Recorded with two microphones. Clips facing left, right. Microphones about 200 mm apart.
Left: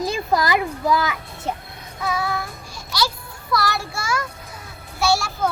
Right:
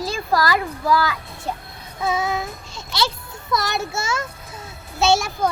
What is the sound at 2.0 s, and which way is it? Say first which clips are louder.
Child singing: right 2 dB; 25° right (ahead or behind).